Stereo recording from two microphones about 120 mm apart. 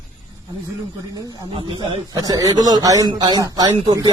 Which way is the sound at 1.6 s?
45° right (ahead or behind).